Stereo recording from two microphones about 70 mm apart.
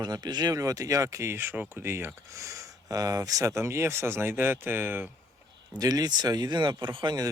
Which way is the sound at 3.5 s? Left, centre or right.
Right.